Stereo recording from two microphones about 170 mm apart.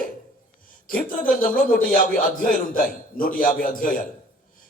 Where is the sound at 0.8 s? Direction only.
55° left (ahead or behind).